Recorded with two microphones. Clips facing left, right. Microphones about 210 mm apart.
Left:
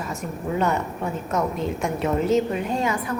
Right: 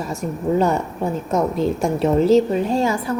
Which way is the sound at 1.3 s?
35° right (ahead or behind).